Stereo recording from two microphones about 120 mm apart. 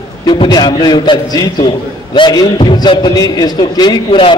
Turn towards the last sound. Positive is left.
turn(degrees=35)  # may be behind; listen again after turning